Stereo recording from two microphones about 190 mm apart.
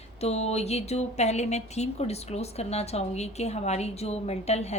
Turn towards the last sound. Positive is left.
turn(degrees=35)  # may be behind; listen again after turning